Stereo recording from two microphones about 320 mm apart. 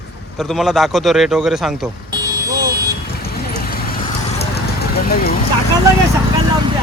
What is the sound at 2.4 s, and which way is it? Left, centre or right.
Vehicle, centre.